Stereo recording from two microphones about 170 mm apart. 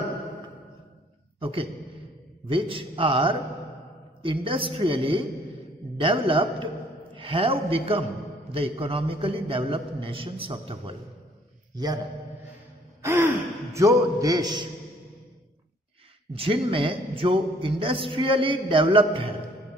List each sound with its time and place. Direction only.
1.4 s a man's voice: 30° right (ahead or behind)
11.7 s a man's voice: 25° right (ahead or behind)
13.0 s gasp: 15° right (ahead or behind)
13.7 s a man's voice: 20° right (ahead or behind)
16.3 s a man's voice: 30° right (ahead or behind)